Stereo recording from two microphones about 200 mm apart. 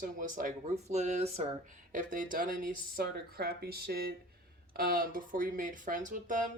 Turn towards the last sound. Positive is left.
turn(degrees=-40)  # may be behind; listen again after turning